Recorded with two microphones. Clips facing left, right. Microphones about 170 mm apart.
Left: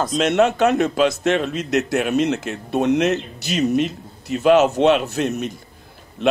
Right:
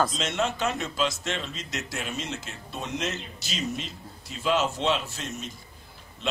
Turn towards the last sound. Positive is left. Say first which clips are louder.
# left 12 dB
turn(degrees=65)  # may be behind; listen again after turning